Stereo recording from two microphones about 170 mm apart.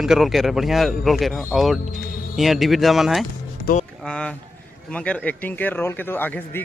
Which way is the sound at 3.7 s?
65° left (ahead or behind).